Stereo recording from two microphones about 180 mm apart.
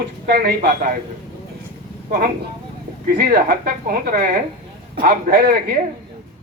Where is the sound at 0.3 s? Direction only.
60° right (ahead or behind).